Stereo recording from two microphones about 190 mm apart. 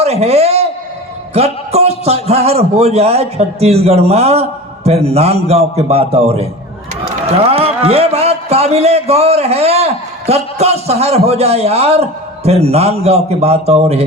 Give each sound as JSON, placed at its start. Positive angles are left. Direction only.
{"t": 0.0, "sound": "a man's voice", "side_deg": -35}